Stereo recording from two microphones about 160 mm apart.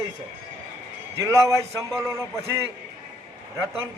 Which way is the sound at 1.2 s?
20° right (ahead or behind).